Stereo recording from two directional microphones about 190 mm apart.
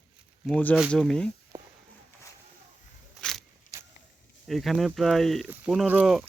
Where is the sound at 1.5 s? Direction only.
15° right (ahead or behind).